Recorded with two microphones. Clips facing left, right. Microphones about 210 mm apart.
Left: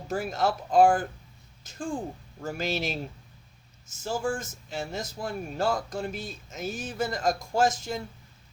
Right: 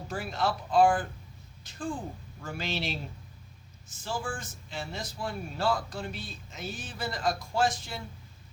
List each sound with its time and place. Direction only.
0.1 s speech: 45° left (ahead or behind)
2.4 s speech: 45° left (ahead or behind)